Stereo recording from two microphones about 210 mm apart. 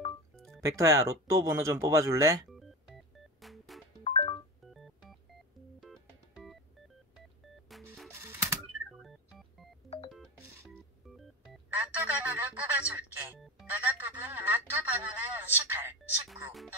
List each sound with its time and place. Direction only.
0.6 s speech: 15° right (ahead or behind)
3.3 s music: centre (ahead or behind)
4.0 s music: 25° left (ahead or behind)
5.8 s music: centre (ahead or behind)
7.7 s music: centre (ahead or behind)
8.2 s typewriter: 10° right (ahead or behind)
9.0 s music: centre (ahead or behind)
9.8 s organ: 25° left (ahead or behind)
10.1 s music: centre (ahead or behind)